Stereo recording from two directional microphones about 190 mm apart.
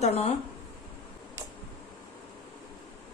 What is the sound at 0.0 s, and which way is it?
Speech, 35° left (ahead or behind).